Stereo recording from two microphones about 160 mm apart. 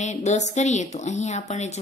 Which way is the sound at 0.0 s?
45° left (ahead or behind).